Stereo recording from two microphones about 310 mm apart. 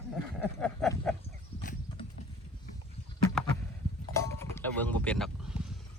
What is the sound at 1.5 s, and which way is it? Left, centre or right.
Clip-clop, centre.